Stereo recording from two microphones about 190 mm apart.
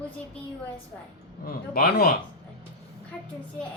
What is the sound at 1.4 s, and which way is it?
Speech, 50° left (ahead or behind).